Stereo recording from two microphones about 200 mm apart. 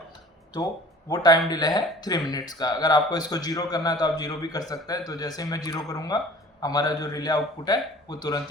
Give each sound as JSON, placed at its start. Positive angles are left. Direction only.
{"t": 0.5, "sound": "speech", "side_deg": 20}